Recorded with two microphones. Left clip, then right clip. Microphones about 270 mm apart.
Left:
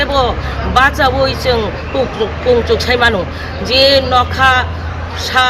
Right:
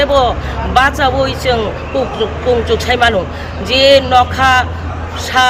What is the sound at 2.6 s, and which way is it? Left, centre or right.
Speech, centre.